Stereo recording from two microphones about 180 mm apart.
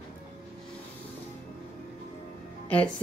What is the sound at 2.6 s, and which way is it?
Speech, 5° left (ahead or behind).